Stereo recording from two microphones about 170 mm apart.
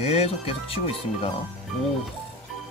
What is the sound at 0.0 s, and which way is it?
Speech, 35° left (ahead or behind).